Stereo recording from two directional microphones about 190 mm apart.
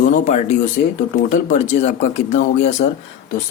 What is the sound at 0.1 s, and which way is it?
Speech, 35° left (ahead or behind).